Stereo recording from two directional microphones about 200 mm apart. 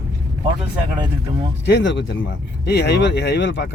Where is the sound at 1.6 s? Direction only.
60° left (ahead or behind).